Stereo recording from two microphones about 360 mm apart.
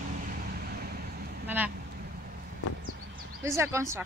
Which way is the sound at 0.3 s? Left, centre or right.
Right.